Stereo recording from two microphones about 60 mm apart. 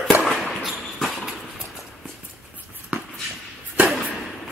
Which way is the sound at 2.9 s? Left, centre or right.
Centre.